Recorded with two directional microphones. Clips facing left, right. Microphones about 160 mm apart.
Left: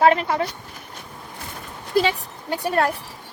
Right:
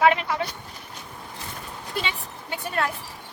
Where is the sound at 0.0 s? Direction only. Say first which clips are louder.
Left 3 dB; 40° left (ahead or behind).